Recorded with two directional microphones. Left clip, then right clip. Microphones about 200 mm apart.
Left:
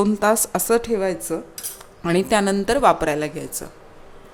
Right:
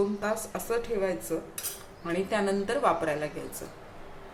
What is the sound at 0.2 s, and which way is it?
A woman's voice, 55° left (ahead or behind).